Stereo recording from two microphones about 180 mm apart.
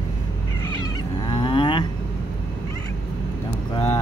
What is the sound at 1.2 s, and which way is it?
Cattle, 25° left (ahead or behind).